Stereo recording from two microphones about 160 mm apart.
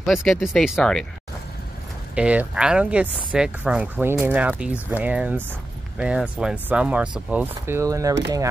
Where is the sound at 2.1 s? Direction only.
5° right (ahead or behind).